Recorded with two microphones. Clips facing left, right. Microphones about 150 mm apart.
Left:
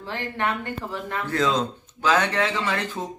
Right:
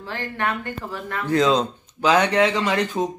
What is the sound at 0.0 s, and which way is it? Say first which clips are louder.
Speech: right 1 dB; 25° left (ahead or behind).